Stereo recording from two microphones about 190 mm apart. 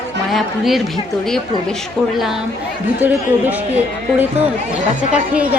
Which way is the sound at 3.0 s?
10° right (ahead or behind).